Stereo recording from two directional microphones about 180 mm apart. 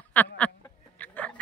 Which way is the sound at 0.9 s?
10° left (ahead or behind).